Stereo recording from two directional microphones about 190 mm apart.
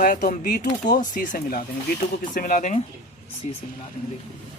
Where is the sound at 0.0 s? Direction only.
45° left (ahead or behind).